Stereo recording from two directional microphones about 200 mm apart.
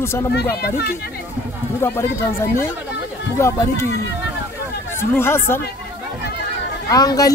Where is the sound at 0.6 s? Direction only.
50° left (ahead or behind).